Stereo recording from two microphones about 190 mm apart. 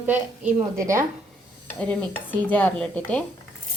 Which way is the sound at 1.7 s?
5° left (ahead or behind).